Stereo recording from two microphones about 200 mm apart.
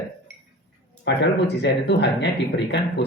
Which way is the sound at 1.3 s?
60° left (ahead or behind).